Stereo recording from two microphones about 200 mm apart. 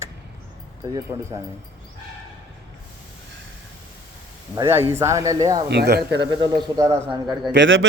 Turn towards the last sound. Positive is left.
turn(degrees=-70)  # may be behind; listen again after turning